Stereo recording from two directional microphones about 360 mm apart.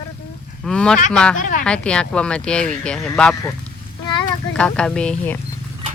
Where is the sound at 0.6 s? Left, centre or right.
Centre.